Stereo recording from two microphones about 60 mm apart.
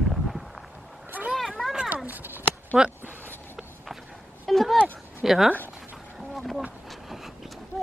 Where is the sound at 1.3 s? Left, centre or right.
Centre.